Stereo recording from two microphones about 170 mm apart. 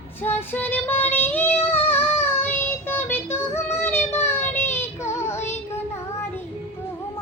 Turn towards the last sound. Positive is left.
turn(degrees=15)  # may be behind; listen again after turning